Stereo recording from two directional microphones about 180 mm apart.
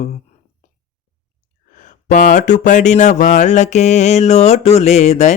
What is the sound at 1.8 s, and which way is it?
Speech, 45° left (ahead or behind).